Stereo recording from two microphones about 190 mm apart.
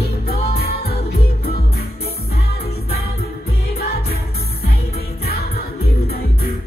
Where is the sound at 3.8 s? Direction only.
55° left (ahead or behind).